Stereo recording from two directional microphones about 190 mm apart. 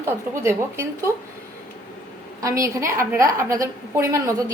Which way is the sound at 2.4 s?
15° right (ahead or behind).